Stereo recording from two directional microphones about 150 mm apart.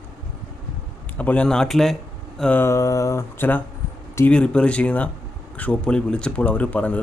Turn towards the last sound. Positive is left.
turn(degrees=10)  # may be behind; listen again after turning